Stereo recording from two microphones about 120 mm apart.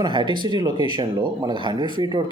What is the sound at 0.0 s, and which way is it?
Speech, 40° right (ahead or behind).